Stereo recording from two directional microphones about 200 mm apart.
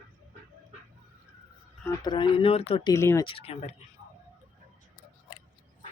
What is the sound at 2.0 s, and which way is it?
Speech, 25° left (ahead or behind).